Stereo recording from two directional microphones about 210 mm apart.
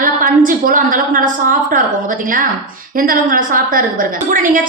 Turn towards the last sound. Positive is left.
turn(degrees=-40)  # may be behind; listen again after turning